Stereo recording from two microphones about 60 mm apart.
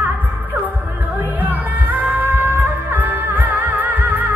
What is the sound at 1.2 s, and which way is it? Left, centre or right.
Music, right.